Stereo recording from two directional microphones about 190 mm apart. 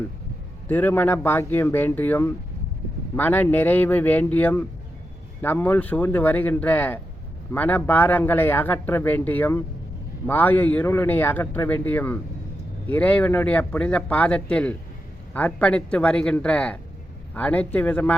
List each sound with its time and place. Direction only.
0.7 s speech: 10° left (ahead or behind)